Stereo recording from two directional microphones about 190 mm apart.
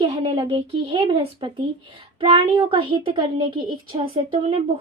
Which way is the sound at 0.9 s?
30° right (ahead or behind).